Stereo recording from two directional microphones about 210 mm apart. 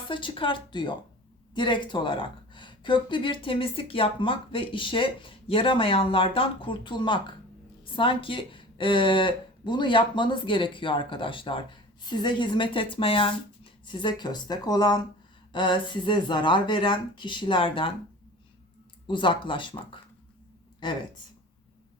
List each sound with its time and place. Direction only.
0.1 s speech: 25° left (ahead or behind)
19.0 s speech: 25° left (ahead or behind)